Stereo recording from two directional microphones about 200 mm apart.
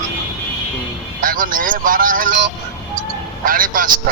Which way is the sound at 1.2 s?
45° right (ahead or behind).